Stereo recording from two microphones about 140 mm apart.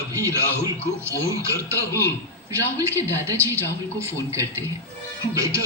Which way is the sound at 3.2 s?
20° right (ahead or behind).